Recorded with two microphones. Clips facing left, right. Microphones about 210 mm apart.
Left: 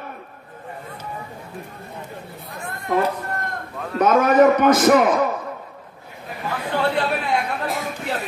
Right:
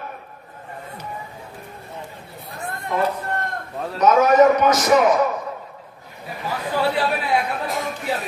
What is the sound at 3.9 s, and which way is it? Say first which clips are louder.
Speech: right 1 dB; 55° left (ahead or behind).